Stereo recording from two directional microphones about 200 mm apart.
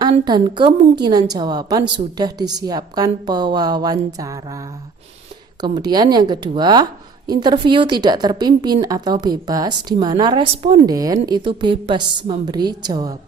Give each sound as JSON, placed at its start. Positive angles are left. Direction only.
{"t": 0.3, "sound": "a woman's voice", "side_deg": -20}